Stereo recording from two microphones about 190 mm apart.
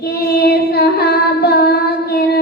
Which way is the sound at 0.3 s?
55° left (ahead or behind).